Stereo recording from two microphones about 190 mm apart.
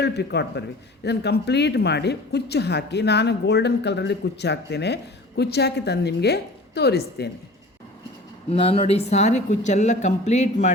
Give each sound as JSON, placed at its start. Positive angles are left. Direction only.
{"t": 0.0, "sound": "a woman's voice", "side_deg": 60}
{"t": 8.4, "sound": "speech", "side_deg": 30}